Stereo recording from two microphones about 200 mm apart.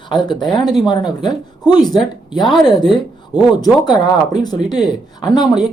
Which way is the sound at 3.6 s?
20° left (ahead or behind).